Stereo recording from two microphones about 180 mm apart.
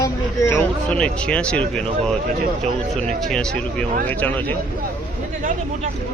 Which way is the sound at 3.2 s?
5° left (ahead or behind).